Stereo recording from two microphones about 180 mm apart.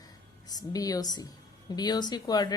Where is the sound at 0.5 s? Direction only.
20° left (ahead or behind).